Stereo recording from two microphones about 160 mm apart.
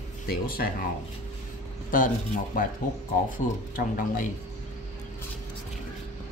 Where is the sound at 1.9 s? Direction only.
60° left (ahead or behind).